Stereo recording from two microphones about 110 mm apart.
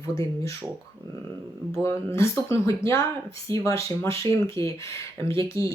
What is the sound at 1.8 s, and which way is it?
Speech, 25° left (ahead or behind).